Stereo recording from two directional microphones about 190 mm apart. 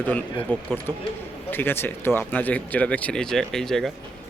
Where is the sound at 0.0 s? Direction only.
10° left (ahead or behind).